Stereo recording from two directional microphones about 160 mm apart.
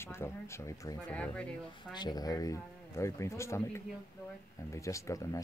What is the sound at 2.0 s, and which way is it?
Speech, 25° left (ahead or behind).